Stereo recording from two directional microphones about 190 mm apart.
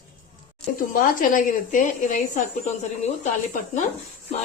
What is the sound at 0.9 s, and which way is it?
A woman's voice, 45° left (ahead or behind).